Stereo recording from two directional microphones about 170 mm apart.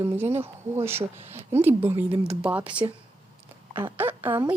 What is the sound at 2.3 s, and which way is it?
Speech, 5° right (ahead or behind).